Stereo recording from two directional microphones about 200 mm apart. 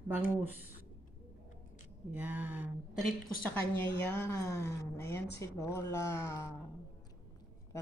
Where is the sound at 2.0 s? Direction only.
10° right (ahead or behind).